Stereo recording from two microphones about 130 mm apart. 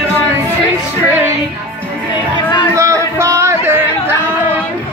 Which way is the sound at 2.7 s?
25° right (ahead or behind).